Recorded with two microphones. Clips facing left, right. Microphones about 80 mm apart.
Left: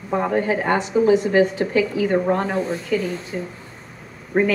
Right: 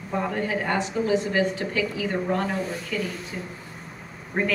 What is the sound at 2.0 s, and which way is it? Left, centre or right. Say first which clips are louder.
Speech: left 8 dB; left.